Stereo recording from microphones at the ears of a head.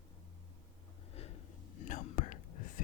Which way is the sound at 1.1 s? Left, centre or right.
Left.